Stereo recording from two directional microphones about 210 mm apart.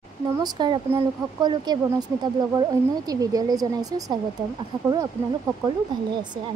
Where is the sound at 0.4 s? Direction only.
20° right (ahead or behind).